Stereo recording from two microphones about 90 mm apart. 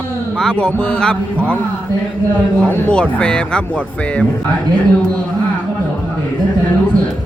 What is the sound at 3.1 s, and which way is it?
A man's voice, 10° left (ahead or behind).